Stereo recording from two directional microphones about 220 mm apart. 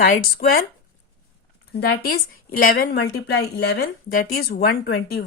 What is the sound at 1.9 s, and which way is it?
A woman's voice, 45° left (ahead or behind).